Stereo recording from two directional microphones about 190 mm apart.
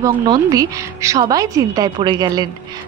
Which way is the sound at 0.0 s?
20° right (ahead or behind).